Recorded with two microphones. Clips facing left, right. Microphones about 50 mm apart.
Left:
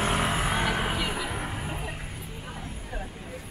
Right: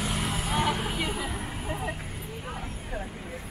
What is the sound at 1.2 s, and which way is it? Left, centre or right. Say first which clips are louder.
Vehicle: left 2 dB; left.